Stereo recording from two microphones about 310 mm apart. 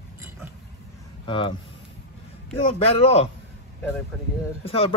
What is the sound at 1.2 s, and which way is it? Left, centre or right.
Speech, centre.